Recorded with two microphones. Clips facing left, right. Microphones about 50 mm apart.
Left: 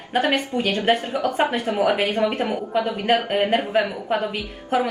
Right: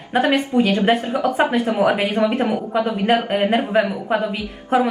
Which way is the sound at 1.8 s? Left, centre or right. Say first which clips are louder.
Right 2 dB; right.